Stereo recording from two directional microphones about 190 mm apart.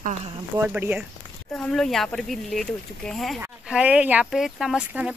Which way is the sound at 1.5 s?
5° left (ahead or behind).